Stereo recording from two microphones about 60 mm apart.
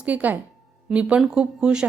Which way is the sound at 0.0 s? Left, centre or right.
Right.